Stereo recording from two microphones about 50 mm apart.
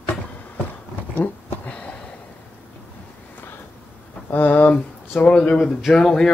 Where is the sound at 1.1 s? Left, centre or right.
Left.